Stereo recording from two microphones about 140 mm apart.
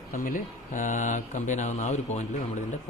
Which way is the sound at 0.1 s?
75° left (ahead or behind).